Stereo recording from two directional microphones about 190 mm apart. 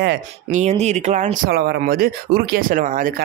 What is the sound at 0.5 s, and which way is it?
Speech, 35° right (ahead or behind).